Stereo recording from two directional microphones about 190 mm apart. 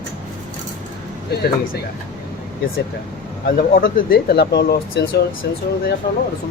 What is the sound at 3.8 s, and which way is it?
Speech, 50° left (ahead or behind).